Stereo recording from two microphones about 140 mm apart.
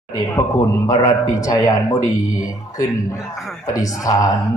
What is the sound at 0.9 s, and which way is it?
Speech, 25° left (ahead or behind).